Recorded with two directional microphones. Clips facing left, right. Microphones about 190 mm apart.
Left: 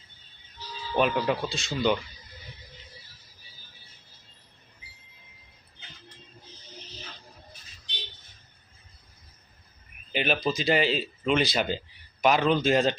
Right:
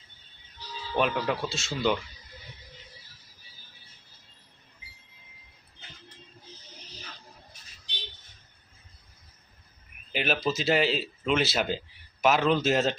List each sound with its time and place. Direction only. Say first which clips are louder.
0.9 s speech: left 2 dB; centre (ahead or behind)
10.1 s speech: left 1 dB; centre (ahead or behind)